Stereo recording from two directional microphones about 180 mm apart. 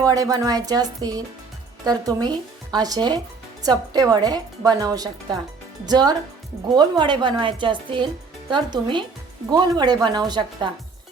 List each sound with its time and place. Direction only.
0.0 s a woman's voice: 20° right (ahead or behind)